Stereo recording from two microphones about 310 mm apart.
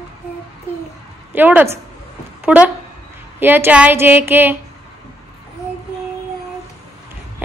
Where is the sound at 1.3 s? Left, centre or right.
Centre.